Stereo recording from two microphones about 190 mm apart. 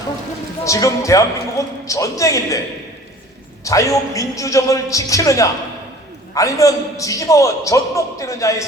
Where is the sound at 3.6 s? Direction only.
15° left (ahead or behind).